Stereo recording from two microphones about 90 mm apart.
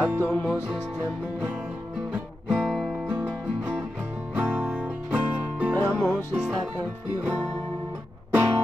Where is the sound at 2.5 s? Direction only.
5° left (ahead or behind).